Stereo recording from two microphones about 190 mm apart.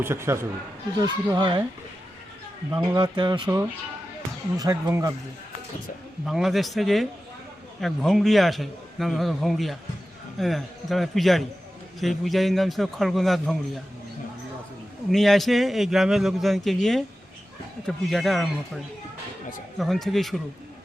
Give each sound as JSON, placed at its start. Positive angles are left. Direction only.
{"t": 0.0, "sound": "speech", "side_deg": -15}
{"t": 2.7, "sound": "speech", "side_deg": -25}
{"t": 6.2, "sound": "a man's voice", "side_deg": 0}
{"t": 15.1, "sound": "a man's voice", "side_deg": 0}
{"t": 19.8, "sound": "a man's voice", "side_deg": 0}